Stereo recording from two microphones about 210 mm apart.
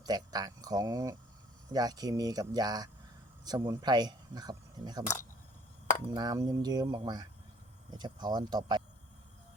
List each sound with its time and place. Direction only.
0.0 s speech: 20° right (ahead or behind)
6.1 s speech: 20° right (ahead or behind)